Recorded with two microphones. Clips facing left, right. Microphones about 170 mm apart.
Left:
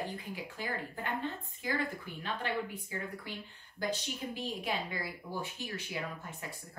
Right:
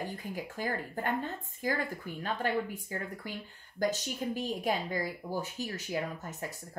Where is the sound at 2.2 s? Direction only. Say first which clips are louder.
Right 4 dB; 45° right (ahead or behind).